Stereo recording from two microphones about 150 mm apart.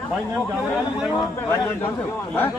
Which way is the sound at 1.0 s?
5° right (ahead or behind).